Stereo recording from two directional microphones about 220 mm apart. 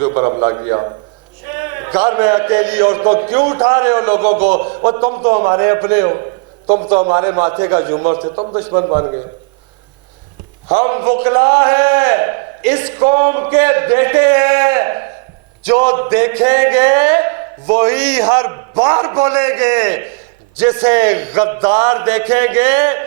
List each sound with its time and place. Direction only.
0.0 s a man's voice: 25° right (ahead or behind)
4.3 s a man's voice: 40° right (ahead or behind)
4.6 s a man's voice: 25° right (ahead or behind)
10.8 s a man's voice: 20° right (ahead or behind)